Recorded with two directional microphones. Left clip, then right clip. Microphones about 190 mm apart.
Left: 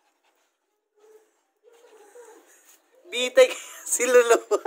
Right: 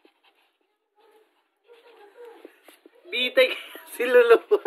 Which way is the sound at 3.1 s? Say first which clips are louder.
Left 2 dB; 25° left (ahead or behind).